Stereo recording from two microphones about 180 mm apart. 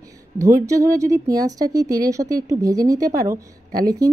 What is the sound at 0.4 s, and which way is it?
A woman's voice, 15° right (ahead or behind).